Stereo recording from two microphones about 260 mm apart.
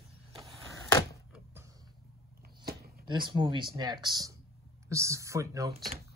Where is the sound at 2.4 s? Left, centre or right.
Right.